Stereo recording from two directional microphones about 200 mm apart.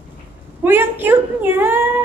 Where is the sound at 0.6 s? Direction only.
10° right (ahead or behind).